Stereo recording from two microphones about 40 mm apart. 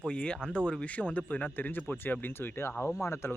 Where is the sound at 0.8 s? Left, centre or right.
Left.